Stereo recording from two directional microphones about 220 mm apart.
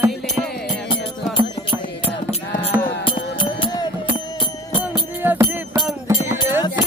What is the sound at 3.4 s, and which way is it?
Music, 20° left (ahead or behind).